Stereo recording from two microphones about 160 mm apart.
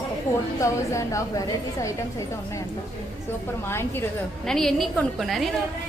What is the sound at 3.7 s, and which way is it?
Speech, 15° left (ahead or behind).